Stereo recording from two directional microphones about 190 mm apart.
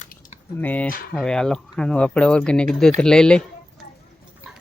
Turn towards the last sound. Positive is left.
turn(degrees=0)  # may be behind; listen again after turning